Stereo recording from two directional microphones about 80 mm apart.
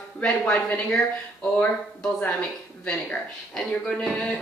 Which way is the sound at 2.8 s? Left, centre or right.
Centre.